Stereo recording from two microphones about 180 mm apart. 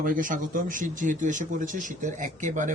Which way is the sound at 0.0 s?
50° right (ahead or behind).